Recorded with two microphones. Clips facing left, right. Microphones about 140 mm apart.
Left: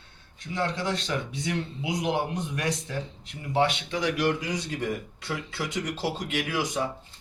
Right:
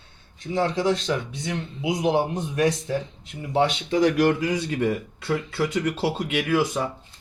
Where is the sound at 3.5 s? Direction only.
40° right (ahead or behind).